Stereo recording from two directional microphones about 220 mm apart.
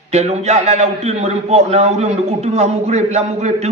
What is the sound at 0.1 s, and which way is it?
A man's voice, 30° right (ahead or behind).